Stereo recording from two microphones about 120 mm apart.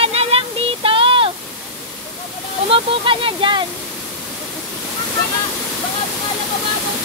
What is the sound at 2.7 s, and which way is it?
Speech, 45° right (ahead or behind).